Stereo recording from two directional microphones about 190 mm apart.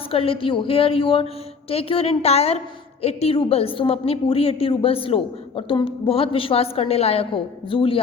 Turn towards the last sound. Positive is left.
turn(degrees=30)  # may be behind; listen again after turning